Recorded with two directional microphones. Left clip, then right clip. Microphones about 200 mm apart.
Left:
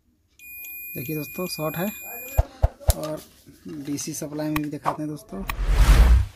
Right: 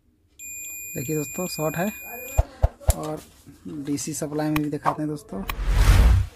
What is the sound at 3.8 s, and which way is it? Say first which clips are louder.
Speech: right 2 dB; 15° right (ahead or behind).